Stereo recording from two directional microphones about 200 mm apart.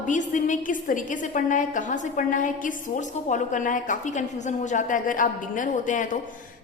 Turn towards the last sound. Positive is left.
turn(degrees=40)  # may be behind; listen again after turning